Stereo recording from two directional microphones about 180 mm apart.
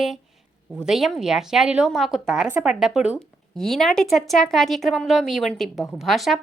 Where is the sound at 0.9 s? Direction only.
Centre (ahead or behind).